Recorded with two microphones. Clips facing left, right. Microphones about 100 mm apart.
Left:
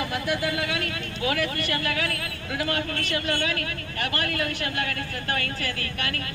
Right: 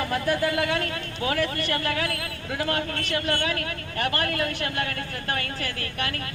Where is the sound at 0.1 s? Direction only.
45° right (ahead or behind).